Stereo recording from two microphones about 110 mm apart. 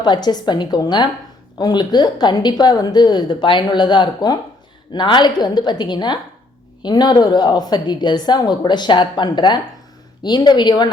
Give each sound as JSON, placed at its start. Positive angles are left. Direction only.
{"t": 0.0, "sound": "a woman's voice", "side_deg": 40}